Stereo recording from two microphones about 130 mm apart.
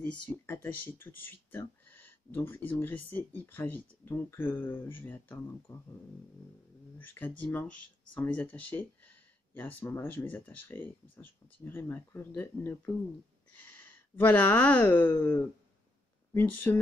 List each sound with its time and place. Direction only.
0.0 s speech: 10° left (ahead or behind)
7.0 s speech: 15° left (ahead or behind)